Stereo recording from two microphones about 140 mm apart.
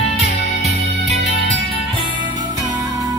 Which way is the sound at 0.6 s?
50° right (ahead or behind).